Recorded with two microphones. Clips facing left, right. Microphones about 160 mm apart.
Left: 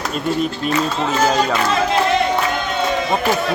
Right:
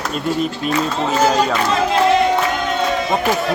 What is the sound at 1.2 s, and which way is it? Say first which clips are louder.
Speech: right 1 dB; centre (ahead or behind).